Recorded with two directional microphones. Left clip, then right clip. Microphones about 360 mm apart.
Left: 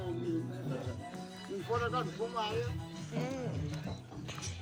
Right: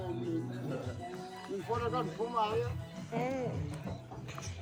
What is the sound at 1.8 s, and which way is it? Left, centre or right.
Music, centre.